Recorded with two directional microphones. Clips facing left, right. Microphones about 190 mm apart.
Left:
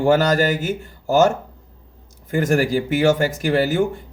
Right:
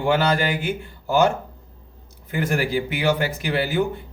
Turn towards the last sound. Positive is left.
turn(degrees=45)  # may be behind; listen again after turning